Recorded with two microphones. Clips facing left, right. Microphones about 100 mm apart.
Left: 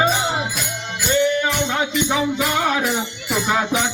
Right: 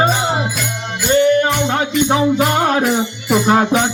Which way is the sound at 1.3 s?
50° right (ahead or behind).